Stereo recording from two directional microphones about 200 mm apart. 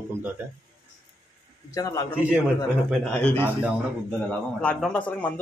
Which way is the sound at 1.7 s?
15° left (ahead or behind).